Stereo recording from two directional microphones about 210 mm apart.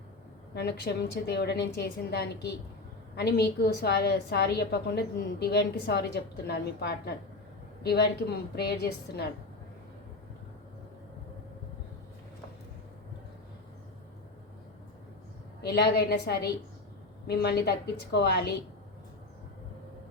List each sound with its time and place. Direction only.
0.5 s a woman's voice: 50° left (ahead or behind)
15.6 s a woman's voice: 50° left (ahead or behind)